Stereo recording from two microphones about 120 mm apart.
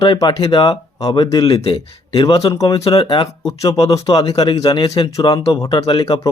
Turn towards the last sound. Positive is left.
turn(degrees=35)  # may be behind; listen again after turning